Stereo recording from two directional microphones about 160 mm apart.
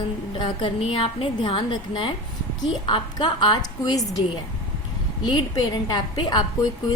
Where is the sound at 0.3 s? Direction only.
30° left (ahead or behind).